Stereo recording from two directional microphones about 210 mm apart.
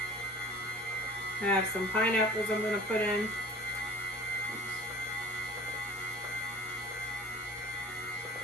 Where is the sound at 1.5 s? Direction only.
5° left (ahead or behind).